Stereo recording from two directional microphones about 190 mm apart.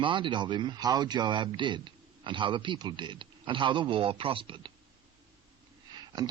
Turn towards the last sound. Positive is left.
turn(degrees=-20)  # may be behind; listen again after turning